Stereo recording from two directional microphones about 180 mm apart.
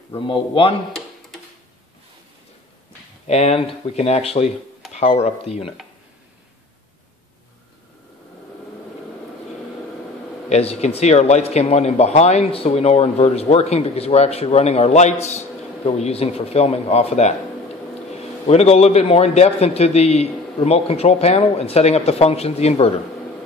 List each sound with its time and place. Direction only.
0.1 s speech: 30° left (ahead or behind)
3.3 s speech: 35° left (ahead or behind)
10.5 s speech: 35° left (ahead or behind)